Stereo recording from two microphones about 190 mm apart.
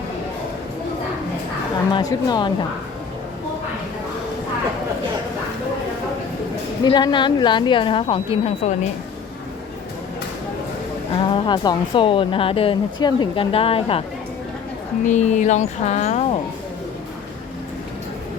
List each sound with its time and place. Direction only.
1.9 s speech: 20° left (ahead or behind)
6.8 s speech: 25° left (ahead or behind)
11.1 s speech: 25° left (ahead or behind)
15.0 s speech: 40° left (ahead or behind)